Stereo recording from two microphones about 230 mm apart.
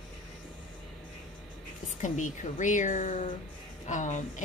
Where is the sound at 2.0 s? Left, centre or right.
Left.